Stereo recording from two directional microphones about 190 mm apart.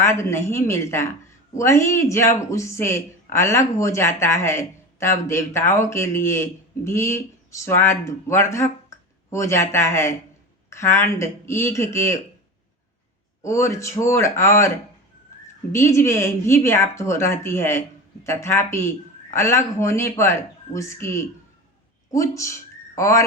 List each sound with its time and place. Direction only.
0.0 s speech: 15° left (ahead or behind)
13.4 s speech: 15° left (ahead or behind)
15.7 s speech: 15° left (ahead or behind)